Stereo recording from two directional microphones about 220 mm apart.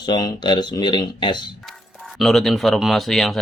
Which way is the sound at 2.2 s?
Centre (ahead or behind).